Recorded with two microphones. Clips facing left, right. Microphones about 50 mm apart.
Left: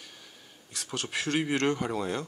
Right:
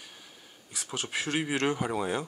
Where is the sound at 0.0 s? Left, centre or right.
Centre.